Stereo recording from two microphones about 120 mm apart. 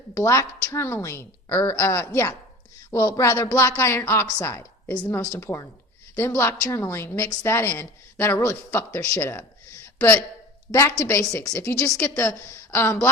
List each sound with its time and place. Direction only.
0.1 s a woman's voice: 25° left (ahead or behind)